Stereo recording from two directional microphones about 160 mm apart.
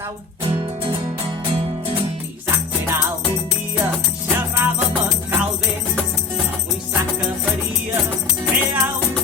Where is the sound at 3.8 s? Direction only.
15° right (ahead or behind).